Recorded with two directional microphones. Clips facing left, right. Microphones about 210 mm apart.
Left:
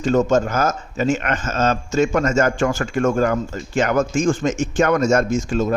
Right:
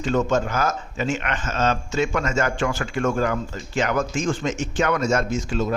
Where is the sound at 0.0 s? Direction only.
40° left (ahead or behind).